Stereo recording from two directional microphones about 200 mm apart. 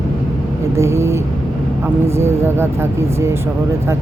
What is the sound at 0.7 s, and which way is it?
Speech, 15° right (ahead or behind).